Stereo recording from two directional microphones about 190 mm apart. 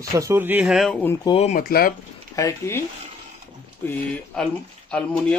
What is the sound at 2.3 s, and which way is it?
Speech, 15° left (ahead or behind).